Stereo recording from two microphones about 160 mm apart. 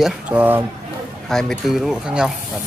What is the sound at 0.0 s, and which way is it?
Speech, 10° right (ahead or behind).